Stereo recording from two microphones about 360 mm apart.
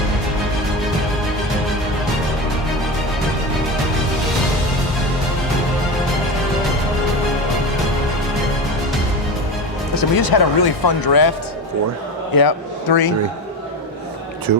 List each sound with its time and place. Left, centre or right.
9.9 s a man's voice: left
14.5 s speech: right